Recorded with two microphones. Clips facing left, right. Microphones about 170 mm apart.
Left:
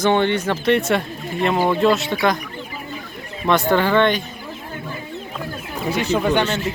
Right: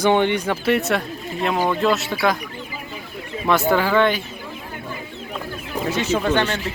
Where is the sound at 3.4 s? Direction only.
5° right (ahead or behind).